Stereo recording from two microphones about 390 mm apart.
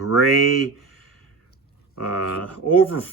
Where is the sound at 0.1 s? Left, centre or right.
Left.